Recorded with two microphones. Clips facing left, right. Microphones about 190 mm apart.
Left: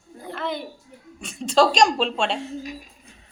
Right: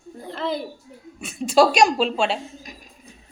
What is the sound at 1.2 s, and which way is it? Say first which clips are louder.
A woman's voice: right 2 dB; 5° right (ahead or behind).